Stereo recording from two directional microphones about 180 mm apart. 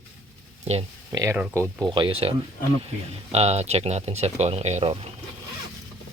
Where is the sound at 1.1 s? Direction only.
20° right (ahead or behind).